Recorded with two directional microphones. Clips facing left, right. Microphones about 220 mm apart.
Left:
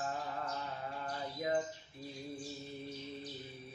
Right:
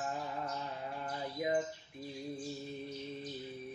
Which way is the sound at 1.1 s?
15° right (ahead or behind).